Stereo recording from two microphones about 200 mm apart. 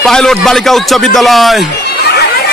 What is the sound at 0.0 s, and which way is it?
Speech, 5° left (ahead or behind).